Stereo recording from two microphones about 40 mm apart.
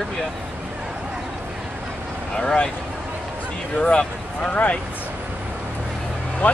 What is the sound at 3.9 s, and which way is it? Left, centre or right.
Speech, left.